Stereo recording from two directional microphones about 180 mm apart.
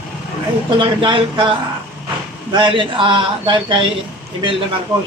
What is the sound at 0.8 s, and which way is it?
A man's voice, 25° right (ahead or behind).